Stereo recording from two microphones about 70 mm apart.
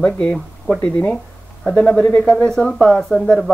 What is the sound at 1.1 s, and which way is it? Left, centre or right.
Speech, centre.